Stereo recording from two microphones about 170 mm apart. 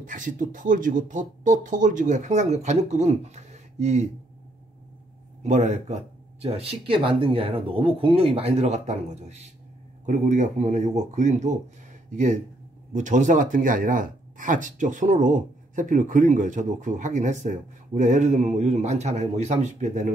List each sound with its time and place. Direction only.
0.0 s speech: 50° right (ahead or behind)
5.4 s speech: 40° right (ahead or behind)